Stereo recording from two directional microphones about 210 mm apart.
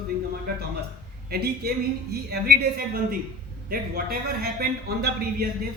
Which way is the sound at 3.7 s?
45° right (ahead or behind).